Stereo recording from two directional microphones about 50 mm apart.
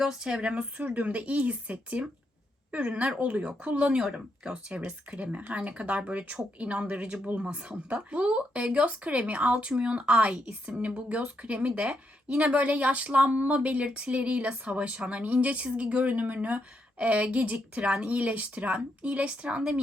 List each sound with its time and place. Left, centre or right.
0.0 s speech: centre
0.5 s a woman's voice: right
4.9 s a woman's voice: right